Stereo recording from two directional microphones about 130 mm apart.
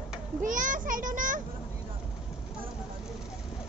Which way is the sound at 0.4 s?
90° right.